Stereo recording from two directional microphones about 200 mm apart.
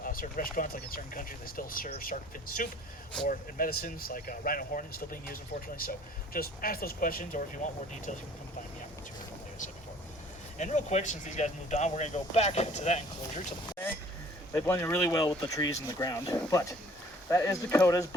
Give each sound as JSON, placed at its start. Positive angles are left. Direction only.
{"t": 0.0, "sound": "speech", "side_deg": 45}
{"t": 10.6, "sound": "speech", "side_deg": 35}
{"t": 14.5, "sound": "speech", "side_deg": 15}